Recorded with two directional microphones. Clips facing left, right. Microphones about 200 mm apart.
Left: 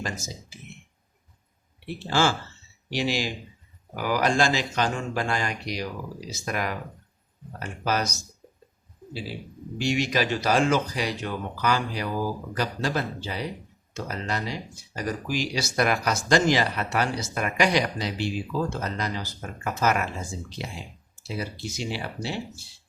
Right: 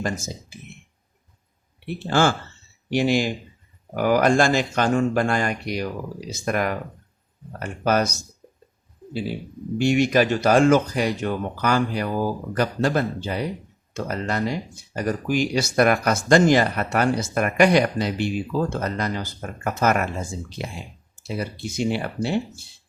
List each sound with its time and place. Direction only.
2.0 s speech: 55° right (ahead or behind)
9.7 s speech: 55° right (ahead or behind)